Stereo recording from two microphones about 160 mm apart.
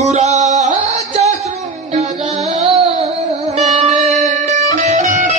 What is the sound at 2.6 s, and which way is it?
Music, 35° right (ahead or behind).